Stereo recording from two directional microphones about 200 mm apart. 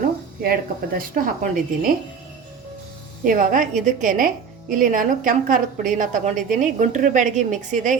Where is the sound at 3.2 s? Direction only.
40° right (ahead or behind).